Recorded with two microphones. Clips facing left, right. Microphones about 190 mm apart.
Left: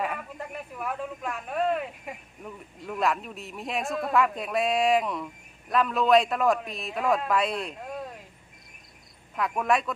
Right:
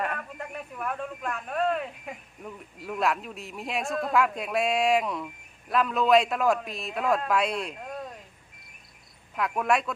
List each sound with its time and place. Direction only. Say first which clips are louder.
0.0 s speech: even; 5° left (ahead or behind)
9.3 s speech: even; centre (ahead or behind)